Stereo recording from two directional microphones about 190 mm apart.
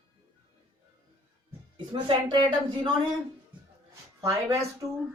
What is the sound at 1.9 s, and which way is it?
Speech, 25° right (ahead or behind).